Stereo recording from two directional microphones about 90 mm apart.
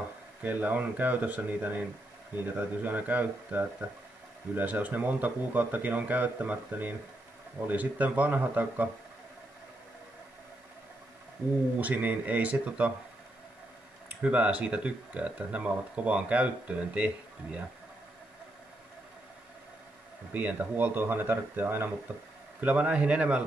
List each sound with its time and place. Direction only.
0.4 s speech: 20° right (ahead or behind)
11.8 s speech: 20° right (ahead or behind)
14.2 s speech: 15° right (ahead or behind)
20.3 s speech: 20° right (ahead or behind)
22.6 s speech: 15° right (ahead or behind)